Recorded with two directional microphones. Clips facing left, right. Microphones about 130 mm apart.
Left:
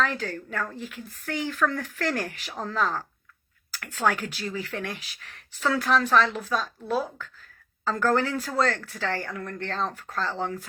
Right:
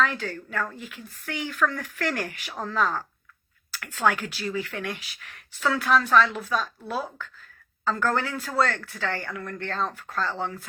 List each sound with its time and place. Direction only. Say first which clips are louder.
0.0 s speech: right 1 dB; 40° left (ahead or behind)